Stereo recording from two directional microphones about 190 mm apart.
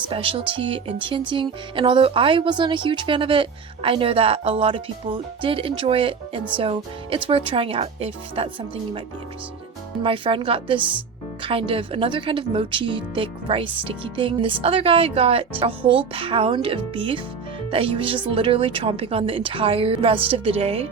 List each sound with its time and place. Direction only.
0.1 s speech: 30° right (ahead or behind)
10.0 s speech: 30° right (ahead or behind)